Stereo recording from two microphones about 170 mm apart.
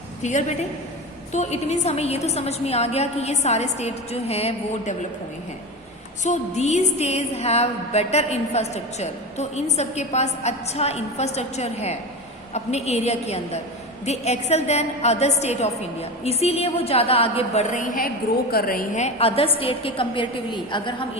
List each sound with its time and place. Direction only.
0.2 s a woman's voice: 45° left (ahead or behind)
1.3 s music: 40° left (ahead or behind)
6.2 s music: 45° left (ahead or behind)